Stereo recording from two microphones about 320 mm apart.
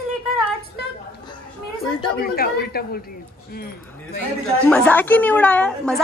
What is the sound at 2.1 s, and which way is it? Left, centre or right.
Speech, left.